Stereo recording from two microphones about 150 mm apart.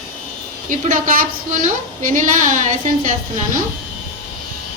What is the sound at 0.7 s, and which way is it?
A woman's voice, 60° right (ahead or behind).